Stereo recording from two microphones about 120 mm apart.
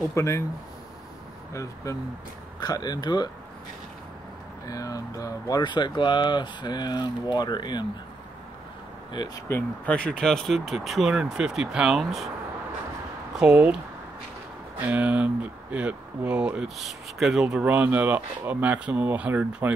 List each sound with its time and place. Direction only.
0.1 s speech: 25° left (ahead or behind)
1.5 s speech: 25° left (ahead or behind)
4.6 s speech: 30° left (ahead or behind)
9.1 s speech: 40° left (ahead or behind)
9.8 s speech: 10° left (ahead or behind)
13.4 s speech: 5° right (ahead or behind)
14.9 s speech: 10° right (ahead or behind)